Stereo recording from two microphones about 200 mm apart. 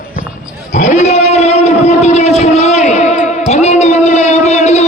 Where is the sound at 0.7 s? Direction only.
35° left (ahead or behind).